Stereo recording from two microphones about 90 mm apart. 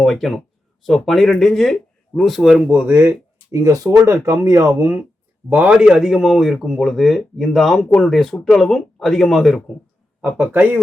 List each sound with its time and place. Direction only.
0.0 s speech: centre (ahead or behind)
2.6 s speech: 20° right (ahead or behind)
5.5 s speech: 15° right (ahead or behind)
10.2 s speech: 20° right (ahead or behind)